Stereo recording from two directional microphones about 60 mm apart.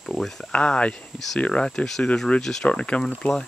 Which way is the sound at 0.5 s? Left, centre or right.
Centre.